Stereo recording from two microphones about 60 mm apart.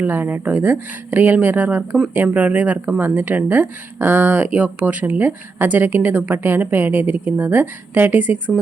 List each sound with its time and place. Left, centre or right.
0.0 s speech: right